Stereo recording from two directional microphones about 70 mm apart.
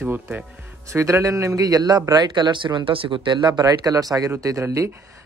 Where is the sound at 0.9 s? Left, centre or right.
Right.